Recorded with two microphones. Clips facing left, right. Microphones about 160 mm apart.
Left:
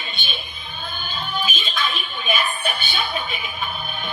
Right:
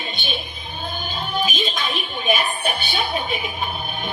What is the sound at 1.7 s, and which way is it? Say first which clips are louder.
Speech: even; 15° right (ahead or behind).